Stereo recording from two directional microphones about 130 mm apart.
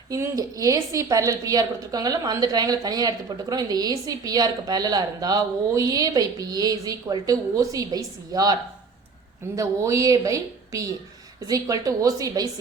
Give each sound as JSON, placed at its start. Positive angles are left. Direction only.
{"t": 0.1, "sound": "a woman's voice", "side_deg": -25}
{"t": 9.6, "sound": "a woman's voice", "side_deg": -25}